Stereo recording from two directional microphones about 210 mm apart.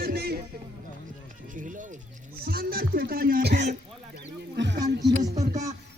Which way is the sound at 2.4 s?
45° right (ahead or behind).